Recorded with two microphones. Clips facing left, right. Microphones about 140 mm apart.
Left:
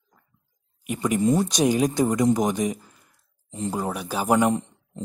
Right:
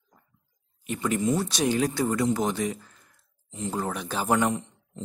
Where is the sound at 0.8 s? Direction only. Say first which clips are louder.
Left 4 dB; 15° left (ahead or behind).